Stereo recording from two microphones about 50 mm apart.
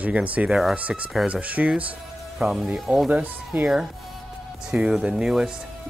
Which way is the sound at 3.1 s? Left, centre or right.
Right.